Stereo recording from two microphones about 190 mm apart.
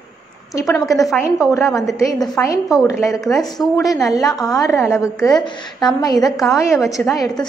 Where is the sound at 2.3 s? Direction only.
15° left (ahead or behind).